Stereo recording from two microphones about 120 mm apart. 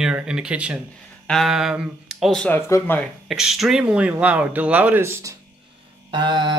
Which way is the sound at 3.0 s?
Centre (ahead or behind).